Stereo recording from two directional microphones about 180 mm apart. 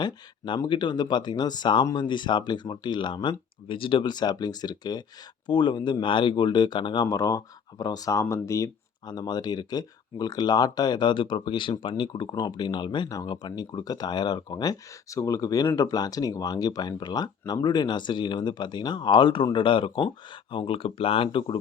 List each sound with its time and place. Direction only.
0.0 s speech: 25° left (ahead or behind)